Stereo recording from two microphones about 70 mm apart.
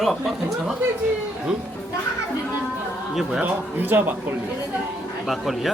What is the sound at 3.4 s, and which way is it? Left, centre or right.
Speech, right.